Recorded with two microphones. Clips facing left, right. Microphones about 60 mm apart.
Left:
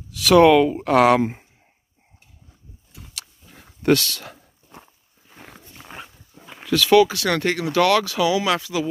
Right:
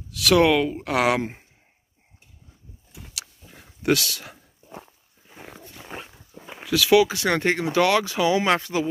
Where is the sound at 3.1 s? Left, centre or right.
Centre.